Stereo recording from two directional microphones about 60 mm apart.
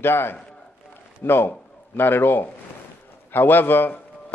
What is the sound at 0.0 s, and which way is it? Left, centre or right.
A man's voice, left.